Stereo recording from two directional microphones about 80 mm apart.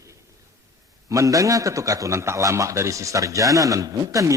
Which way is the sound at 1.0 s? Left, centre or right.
Right.